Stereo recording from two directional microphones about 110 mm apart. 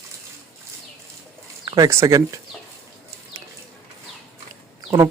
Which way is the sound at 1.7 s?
35° right (ahead or behind).